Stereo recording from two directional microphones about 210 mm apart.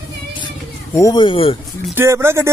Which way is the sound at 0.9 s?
20° left (ahead or behind).